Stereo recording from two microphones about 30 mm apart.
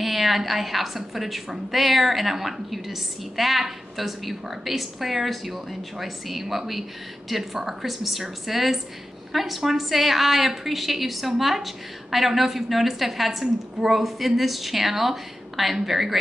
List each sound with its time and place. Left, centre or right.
0.0 s a woman's voice: centre